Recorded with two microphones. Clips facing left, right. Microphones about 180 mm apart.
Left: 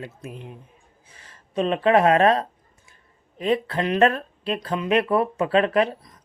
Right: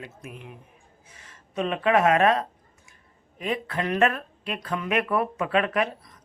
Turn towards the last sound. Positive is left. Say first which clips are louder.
# left 5 dB
turn(degrees=30)  # may be behind; listen again after turning